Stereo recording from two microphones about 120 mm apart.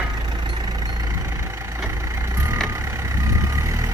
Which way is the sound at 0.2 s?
35° right (ahead or behind).